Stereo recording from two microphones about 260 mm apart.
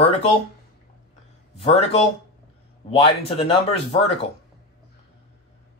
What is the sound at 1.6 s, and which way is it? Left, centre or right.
Speech, left.